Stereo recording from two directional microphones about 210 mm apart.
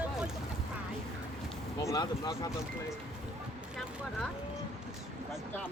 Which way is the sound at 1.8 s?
15° left (ahead or behind).